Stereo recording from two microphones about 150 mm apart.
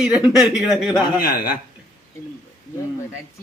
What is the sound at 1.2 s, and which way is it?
Speech, 85° left.